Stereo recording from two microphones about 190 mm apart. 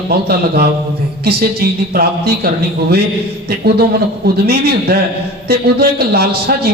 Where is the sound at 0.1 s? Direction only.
55° right (ahead or behind).